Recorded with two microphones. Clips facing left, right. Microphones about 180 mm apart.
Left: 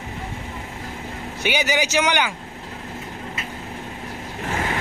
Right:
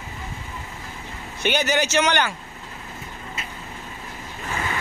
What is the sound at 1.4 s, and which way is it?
Speech, 10° left (ahead or behind).